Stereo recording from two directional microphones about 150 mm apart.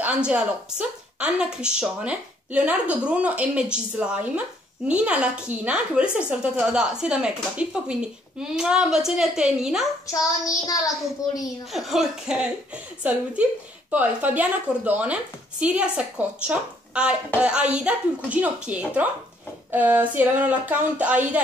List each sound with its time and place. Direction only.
0.0 s a woman's voice: 10° right (ahead or behind)
10.1 s child singing: 25° left (ahead or behind)
11.7 s a woman's voice: centre (ahead or behind)